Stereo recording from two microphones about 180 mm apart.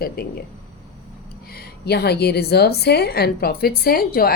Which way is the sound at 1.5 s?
65° left (ahead or behind).